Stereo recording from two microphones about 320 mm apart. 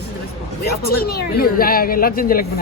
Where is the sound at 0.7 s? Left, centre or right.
Left.